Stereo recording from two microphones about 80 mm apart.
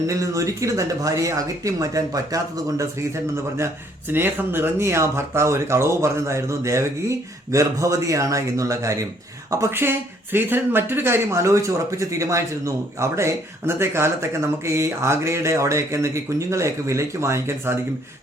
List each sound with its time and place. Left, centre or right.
0.1 s speech: right
4.1 s speech: right